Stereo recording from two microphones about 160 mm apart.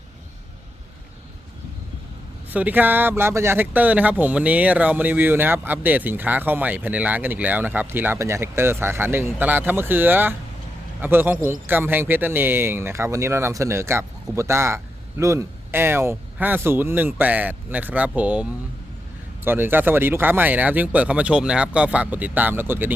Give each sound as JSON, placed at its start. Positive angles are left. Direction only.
{"t": 2.5, "sound": "speech", "side_deg": -10}
{"t": 19.5, "sound": "speech", "side_deg": -15}